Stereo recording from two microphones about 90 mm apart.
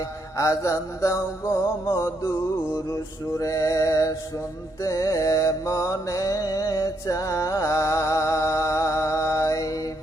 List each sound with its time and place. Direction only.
0.3 s mantra: 35° left (ahead or behind)